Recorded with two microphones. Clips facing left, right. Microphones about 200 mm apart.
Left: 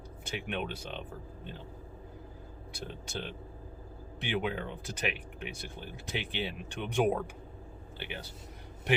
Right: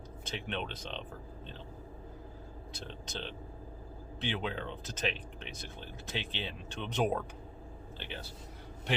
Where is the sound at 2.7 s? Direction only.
10° left (ahead or behind).